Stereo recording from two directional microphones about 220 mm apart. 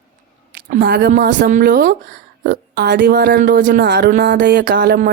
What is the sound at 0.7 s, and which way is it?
Speech, 45° right (ahead or behind).